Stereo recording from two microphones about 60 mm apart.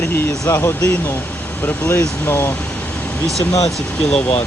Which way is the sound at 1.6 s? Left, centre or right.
Left.